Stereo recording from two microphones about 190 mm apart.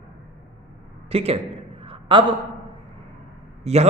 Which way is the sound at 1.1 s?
30° right (ahead or behind).